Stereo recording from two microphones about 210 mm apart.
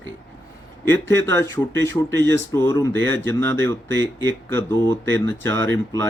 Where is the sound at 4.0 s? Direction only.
60° right (ahead or behind).